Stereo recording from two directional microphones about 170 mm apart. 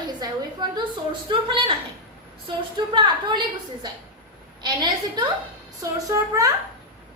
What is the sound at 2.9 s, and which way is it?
Speech, 30° right (ahead or behind).